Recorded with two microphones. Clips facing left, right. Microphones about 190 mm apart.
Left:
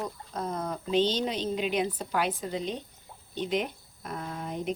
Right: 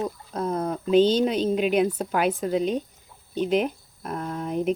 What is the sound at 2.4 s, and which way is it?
Speech, 60° right (ahead or behind).